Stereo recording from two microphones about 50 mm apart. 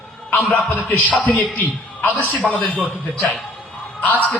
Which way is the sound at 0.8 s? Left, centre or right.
Left.